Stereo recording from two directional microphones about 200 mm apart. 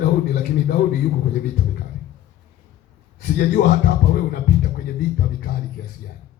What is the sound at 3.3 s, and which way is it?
Speech, 50° left (ahead or behind).